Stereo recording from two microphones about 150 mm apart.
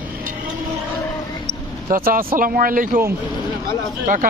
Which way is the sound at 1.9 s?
70° right (ahead or behind).